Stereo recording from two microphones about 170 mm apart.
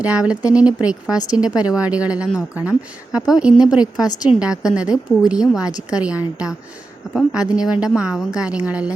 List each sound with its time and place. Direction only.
0.0 s a woman's voice: 5° right (ahead or behind)